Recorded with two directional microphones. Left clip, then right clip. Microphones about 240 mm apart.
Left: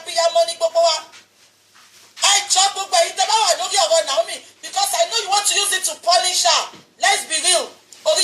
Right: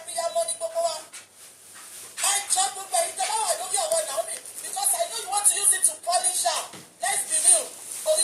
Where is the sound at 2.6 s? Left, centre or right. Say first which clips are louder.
Left 10 dB; left.